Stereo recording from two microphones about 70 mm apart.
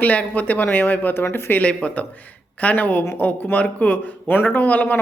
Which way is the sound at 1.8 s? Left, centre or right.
Centre.